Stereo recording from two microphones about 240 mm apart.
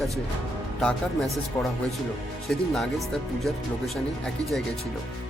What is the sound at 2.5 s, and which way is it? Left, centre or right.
Speech, centre.